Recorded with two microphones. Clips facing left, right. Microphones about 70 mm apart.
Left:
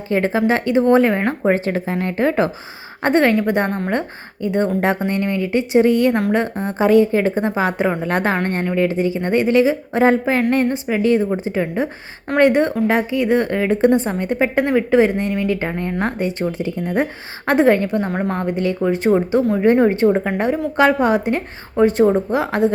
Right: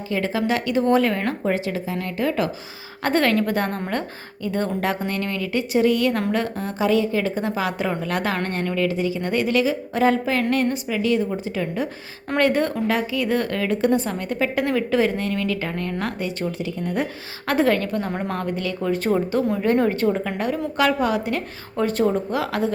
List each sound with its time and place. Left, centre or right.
0.1 s speech: left
3.0 s a woman's voice: left